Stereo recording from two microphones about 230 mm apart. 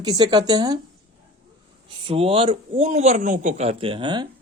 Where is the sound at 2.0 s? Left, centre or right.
Right.